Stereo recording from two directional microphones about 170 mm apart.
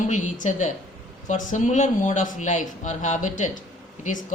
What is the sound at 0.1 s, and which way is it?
A man's voice, 45° left (ahead or behind).